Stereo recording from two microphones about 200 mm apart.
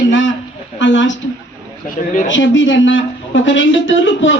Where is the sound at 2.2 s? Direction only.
70° left (ahead or behind).